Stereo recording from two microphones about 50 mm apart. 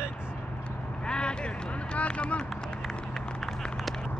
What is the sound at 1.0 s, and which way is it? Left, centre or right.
Vehicle, centre.